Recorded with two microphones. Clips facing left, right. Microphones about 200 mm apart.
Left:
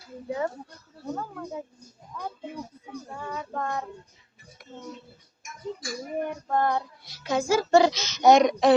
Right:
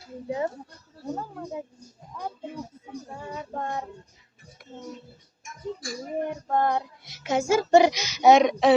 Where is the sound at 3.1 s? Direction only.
25° right (ahead or behind).